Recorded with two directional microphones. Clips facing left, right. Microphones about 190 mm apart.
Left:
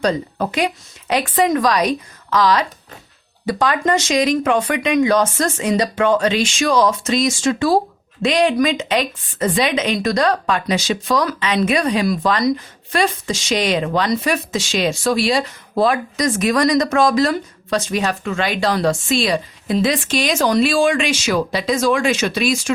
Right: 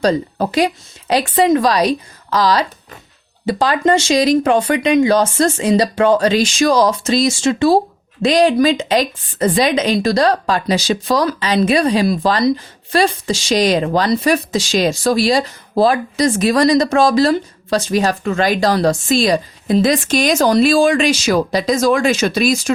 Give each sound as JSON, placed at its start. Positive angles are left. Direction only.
{"t": 0.0, "sound": "a woman's voice", "side_deg": -35}